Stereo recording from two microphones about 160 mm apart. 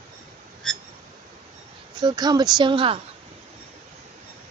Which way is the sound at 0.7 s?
5° left (ahead or behind).